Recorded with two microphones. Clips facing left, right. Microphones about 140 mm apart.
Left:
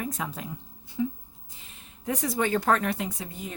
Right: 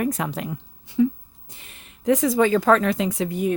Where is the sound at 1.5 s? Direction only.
70° right (ahead or behind); by 2.3 s 90° right.